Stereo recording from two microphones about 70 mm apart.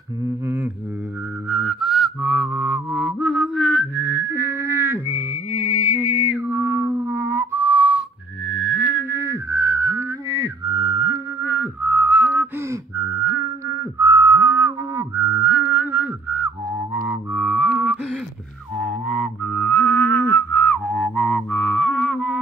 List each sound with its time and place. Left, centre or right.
1.5 s music: centre; by 5.4 s right
5.5 s music: centre
8.5 s music: centre
9.1 s whistling: right
11.4 s whistling: right
12.9 s whistling: right
15.6 s music: right; by 17.9 s centre
19.0 s music: centre